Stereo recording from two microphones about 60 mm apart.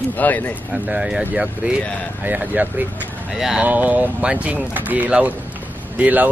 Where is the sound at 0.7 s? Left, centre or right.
Right.